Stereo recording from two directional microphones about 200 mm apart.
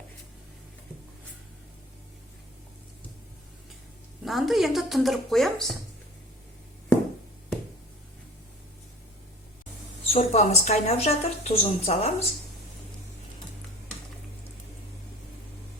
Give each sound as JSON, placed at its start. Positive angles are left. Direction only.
{"t": 4.2, "sound": "speech", "side_deg": 0}
{"t": 10.1, "sound": "a woman's voice", "side_deg": 30}